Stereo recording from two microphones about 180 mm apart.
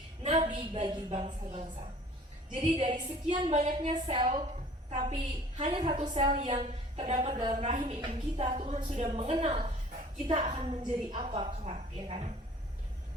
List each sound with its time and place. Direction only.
0.2 s a sound: 35° right (ahead or behind)
0.6 s a woman's voice: 30° right (ahead or behind)
4.9 s a woman's voice: 40° right (ahead or behind)
5.6 s a woman's voice: 25° right (ahead or behind)